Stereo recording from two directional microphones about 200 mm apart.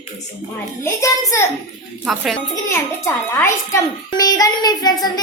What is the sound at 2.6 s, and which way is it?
A child's voice, 15° left (ahead or behind).